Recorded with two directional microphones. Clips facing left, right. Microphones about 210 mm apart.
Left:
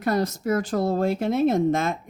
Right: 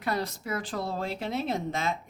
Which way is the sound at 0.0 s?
45° left (ahead or behind).